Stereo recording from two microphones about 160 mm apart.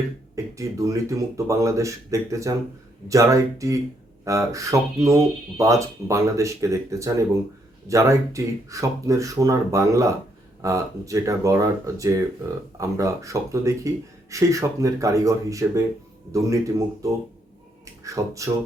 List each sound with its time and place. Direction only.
0.5 s speech: 20° right (ahead or behind)